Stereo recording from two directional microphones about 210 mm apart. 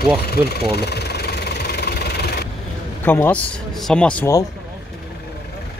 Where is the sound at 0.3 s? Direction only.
50° left (ahead or behind).